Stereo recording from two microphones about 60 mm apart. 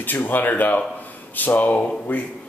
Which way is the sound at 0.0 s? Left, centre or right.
Left.